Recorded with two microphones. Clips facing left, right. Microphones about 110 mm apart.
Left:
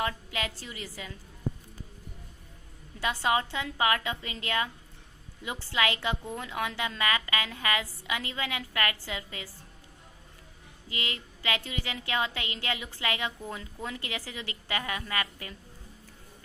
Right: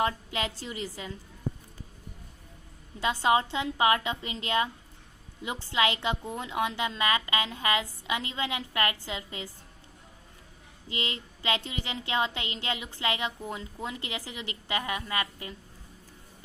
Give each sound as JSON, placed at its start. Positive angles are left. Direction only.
{"t": 0.0, "sound": "a woman's voice", "side_deg": -25}
{"t": 3.0, "sound": "a woman's voice", "side_deg": -20}
{"t": 10.8, "sound": "a woman's voice", "side_deg": -25}